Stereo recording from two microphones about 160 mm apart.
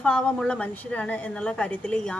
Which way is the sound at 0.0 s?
5° left (ahead or behind).